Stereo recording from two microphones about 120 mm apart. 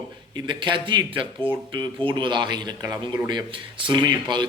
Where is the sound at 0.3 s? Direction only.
40° right (ahead or behind).